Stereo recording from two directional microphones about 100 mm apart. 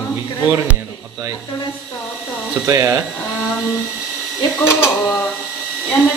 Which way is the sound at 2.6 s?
30° right (ahead or behind).